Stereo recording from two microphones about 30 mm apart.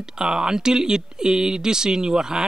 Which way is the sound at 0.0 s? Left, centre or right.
Right.